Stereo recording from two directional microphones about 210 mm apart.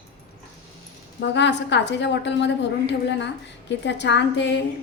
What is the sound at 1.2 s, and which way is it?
A woman's voice, 55° left (ahead or behind).